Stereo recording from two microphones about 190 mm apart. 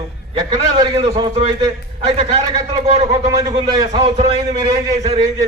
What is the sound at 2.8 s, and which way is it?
Speech, 35° right (ahead or behind).